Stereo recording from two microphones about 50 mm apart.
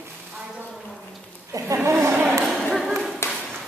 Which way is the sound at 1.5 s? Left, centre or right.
Right.